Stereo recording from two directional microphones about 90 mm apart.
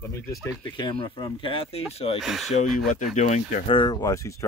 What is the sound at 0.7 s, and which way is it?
Speech, 65° left (ahead or behind).